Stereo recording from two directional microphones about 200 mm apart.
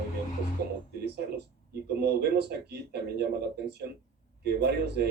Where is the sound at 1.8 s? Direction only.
55° right (ahead or behind).